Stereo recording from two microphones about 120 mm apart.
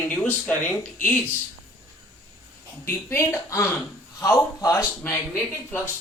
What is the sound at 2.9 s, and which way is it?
Speech, 20° left (ahead or behind).